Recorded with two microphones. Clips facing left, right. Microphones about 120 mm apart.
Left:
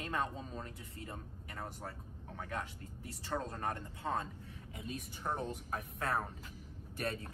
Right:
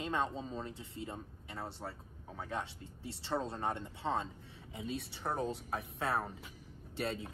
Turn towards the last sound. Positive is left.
turn(degrees=-25)  # may be behind; listen again after turning